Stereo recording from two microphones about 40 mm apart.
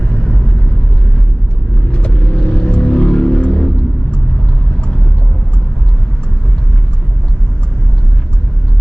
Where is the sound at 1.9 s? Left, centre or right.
Left.